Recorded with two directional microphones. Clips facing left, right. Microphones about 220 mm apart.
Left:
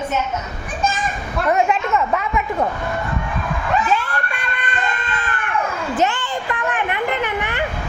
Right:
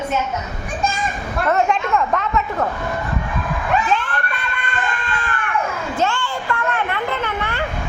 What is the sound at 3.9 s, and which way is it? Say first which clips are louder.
Emergency vehicle: even; 10° left (ahead or behind).